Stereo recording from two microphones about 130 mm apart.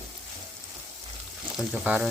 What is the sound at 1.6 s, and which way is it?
Speech, 5° right (ahead or behind).